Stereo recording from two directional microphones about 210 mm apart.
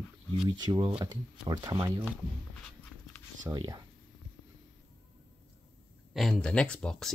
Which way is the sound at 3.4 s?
20° right (ahead or behind).